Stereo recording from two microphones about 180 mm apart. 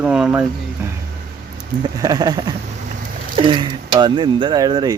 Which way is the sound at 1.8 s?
20° right (ahead or behind).